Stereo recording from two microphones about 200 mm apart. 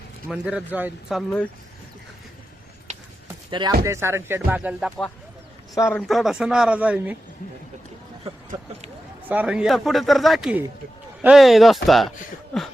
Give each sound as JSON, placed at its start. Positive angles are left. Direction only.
{"t": 0.3, "sound": "speech", "side_deg": -5}
{"t": 3.5, "sound": "speech", "side_deg": -20}
{"t": 5.7, "sound": "speech", "side_deg": 15}
{"t": 6.0, "sound": "speech", "side_deg": 0}
{"t": 9.3, "sound": "speech", "side_deg": -5}